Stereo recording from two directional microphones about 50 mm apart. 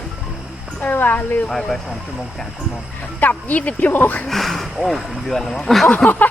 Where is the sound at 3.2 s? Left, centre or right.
Left.